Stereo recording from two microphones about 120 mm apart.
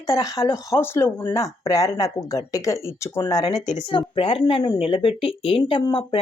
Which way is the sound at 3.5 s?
35° left (ahead or behind).